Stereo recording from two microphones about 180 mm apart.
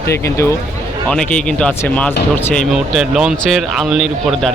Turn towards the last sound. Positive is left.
turn(degrees=0)  # may be behind; listen again after turning